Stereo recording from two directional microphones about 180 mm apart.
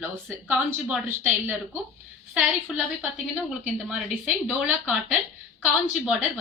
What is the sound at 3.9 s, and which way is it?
Speech, 5° right (ahead or behind).